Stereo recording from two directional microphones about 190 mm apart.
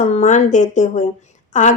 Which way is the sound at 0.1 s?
40° left (ahead or behind).